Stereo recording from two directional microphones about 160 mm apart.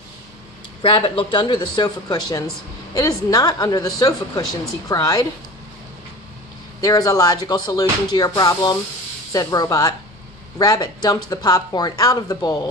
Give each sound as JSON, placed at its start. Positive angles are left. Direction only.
{"t": 0.8, "sound": "a woman's voice", "side_deg": 30}
{"t": 6.8, "sound": "a woman's voice", "side_deg": 20}